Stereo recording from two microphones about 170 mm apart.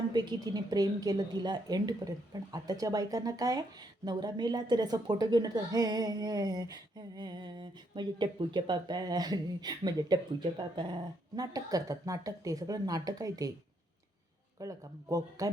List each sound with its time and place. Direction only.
0.1 s a woman's voice: 25° right (ahead or behind)
14.6 s a woman's voice: 20° right (ahead or behind)